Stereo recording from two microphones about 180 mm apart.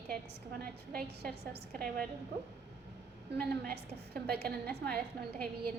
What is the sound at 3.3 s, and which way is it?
A woman's voice, 65° right (ahead or behind).